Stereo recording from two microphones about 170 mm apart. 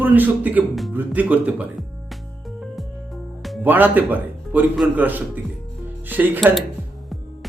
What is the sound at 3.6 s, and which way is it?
Speech, 10° right (ahead or behind).